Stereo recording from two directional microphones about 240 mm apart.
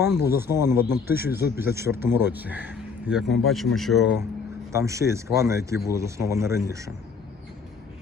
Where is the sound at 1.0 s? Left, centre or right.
Left.